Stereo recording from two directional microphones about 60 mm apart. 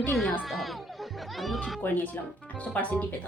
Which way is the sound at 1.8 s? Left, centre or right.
Left.